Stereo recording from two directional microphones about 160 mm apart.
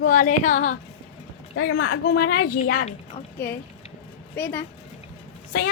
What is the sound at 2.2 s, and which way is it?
Speech, 70° left (ahead or behind).